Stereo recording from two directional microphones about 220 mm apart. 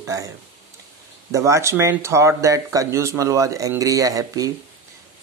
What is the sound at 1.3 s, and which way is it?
Speech, 15° right (ahead or behind).